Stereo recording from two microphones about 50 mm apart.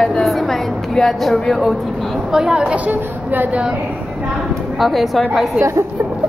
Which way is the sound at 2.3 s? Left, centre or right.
Centre.